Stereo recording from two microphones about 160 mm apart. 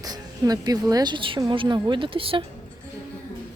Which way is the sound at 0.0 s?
25° right (ahead or behind).